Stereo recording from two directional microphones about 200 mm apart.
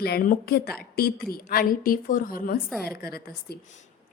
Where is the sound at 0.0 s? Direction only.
45° left (ahead or behind).